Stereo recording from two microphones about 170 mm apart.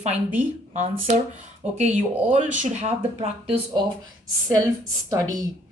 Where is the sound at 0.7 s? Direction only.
45° right (ahead or behind).